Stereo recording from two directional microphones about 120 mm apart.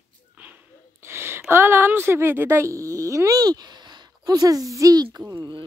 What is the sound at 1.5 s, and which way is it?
Speech, 20° right (ahead or behind).